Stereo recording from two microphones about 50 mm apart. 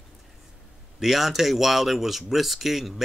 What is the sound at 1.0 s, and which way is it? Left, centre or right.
Speech, centre.